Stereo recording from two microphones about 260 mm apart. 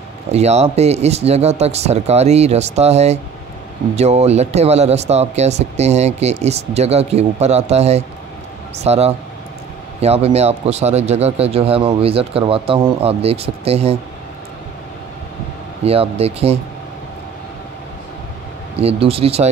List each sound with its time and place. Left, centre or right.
0.3 s speech: right
15.8 s speech: right
19.0 s speech: right